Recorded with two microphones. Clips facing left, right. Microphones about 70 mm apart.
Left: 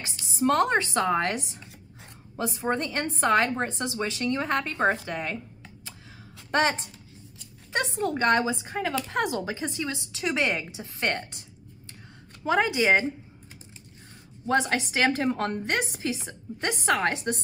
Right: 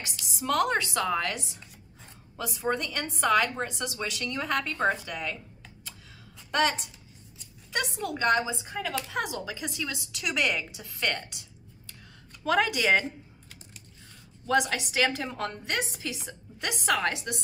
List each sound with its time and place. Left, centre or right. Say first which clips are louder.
0.1 s a woman's voice: left 5 dB; left
6.5 s a woman's voice: left 2 dB; left
8.3 s speech: even; left
12.4 s a woman's voice: left 2 dB; left
14.4 s a woman's voice: left 1 dB; left